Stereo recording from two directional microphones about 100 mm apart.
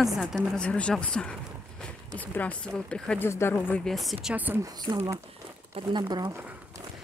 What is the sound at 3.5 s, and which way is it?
Speech, 15° left (ahead or behind).